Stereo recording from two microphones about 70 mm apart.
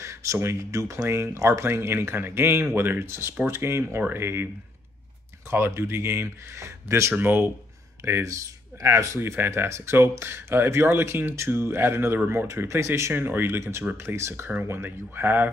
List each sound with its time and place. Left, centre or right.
0.0 s speech: right
1.0 s speech: right
5.5 s speech: right
8.0 s speech: right